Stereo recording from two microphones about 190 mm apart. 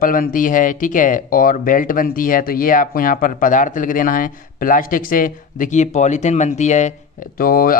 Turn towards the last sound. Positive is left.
turn(degrees=50)  # may be behind; listen again after turning